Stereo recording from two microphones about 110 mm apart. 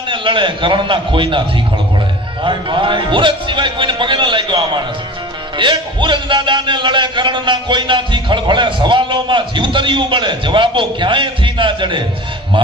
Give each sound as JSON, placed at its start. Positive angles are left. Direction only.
{"t": 0.1, "sound": "a man's voice", "side_deg": -50}
{"t": 2.4, "sound": "a man's voice", "side_deg": -45}